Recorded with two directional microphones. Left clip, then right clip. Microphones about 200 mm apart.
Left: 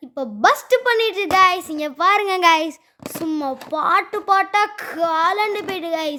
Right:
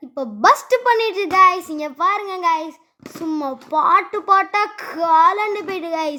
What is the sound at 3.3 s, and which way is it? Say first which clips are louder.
A child's voice: right 2 dB; 20° left (ahead or behind).